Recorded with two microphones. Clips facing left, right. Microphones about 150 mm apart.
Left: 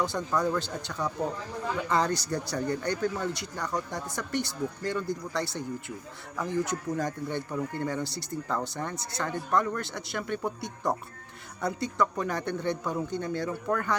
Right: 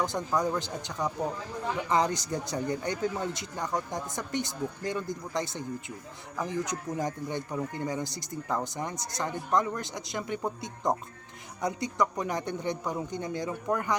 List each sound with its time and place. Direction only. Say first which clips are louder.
0.0 s speech: left 1 dB; 15° right (ahead or behind)